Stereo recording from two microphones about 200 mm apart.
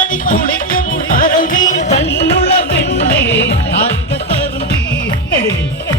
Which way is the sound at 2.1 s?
60° left (ahead or behind).